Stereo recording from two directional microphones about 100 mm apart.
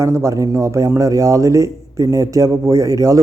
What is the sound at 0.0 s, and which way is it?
Speech, 30° right (ahead or behind).